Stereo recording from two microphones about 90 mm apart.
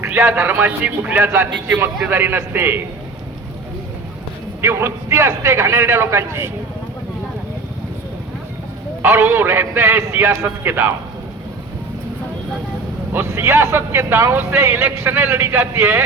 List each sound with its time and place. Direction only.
0.0 s a man's voice: 25° right (ahead or behind)
4.6 s a man's voice: 30° right (ahead or behind)
9.0 s a man's voice: 25° right (ahead or behind)
13.1 s a man's voice: 30° right (ahead or behind)